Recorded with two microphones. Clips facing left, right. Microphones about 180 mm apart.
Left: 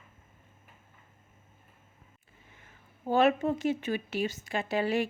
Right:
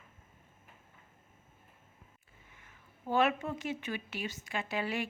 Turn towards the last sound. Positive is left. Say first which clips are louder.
# left 7 dB
turn(degrees=35)  # may be behind; listen again after turning